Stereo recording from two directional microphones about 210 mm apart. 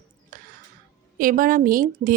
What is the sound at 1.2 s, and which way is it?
Speech, 40° right (ahead or behind).